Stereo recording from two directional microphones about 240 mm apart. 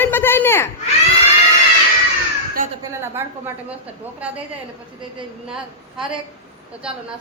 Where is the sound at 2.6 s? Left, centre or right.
Right.